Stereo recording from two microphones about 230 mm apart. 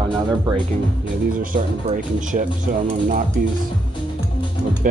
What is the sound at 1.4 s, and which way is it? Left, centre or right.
Speech, right.